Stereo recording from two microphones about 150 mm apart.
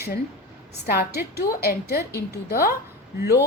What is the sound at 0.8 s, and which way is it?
A woman's voice, 90° left.